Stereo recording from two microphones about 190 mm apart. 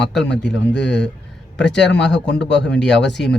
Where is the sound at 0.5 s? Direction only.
65° left (ahead or behind).